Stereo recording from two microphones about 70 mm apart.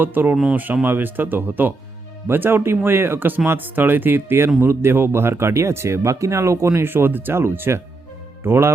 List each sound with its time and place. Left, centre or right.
0.0 s speech: right